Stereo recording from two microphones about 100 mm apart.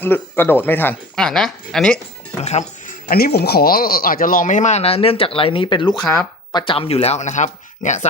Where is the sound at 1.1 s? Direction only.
5° left (ahead or behind).